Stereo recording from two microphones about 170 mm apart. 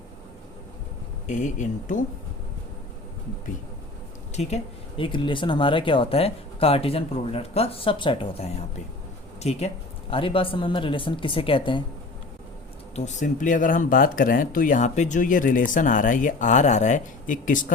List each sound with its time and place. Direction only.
1.3 s speech: 45° left (ahead or behind)
4.4 s speech: 35° left (ahead or behind)
13.1 s speech: 45° left (ahead or behind)